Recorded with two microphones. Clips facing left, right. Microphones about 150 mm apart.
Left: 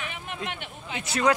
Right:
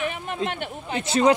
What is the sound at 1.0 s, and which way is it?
Speech, 25° right (ahead or behind).